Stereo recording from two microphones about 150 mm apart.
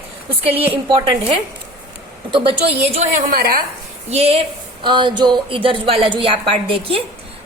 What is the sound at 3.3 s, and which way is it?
Speech, 75° right (ahead or behind).